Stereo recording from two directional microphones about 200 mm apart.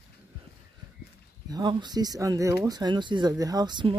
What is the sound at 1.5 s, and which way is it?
Speech, 20° right (ahead or behind).